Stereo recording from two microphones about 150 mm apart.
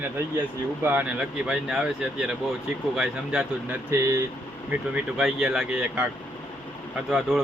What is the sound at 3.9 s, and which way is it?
Speech, 20° right (ahead or behind).